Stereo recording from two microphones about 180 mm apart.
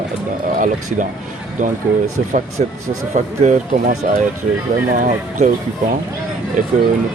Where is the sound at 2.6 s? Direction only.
40° right (ahead or behind).